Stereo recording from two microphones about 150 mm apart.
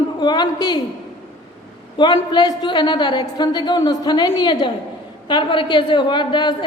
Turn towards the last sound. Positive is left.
turn(degrees=30)  # may be behind; listen again after turning